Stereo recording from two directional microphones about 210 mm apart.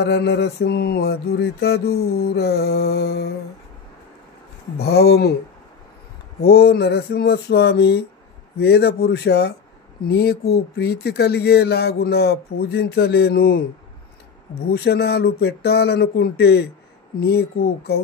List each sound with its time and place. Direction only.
0.0 s speech: 50° left (ahead or behind)
4.7 s speech: 50° left (ahead or behind)
6.4 s speech: 50° left (ahead or behind)
14.7 s speech: 50° left (ahead or behind)